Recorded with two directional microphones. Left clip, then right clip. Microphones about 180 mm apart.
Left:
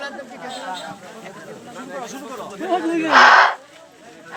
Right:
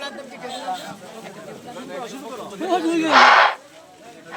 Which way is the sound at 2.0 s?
40° left (ahead or behind).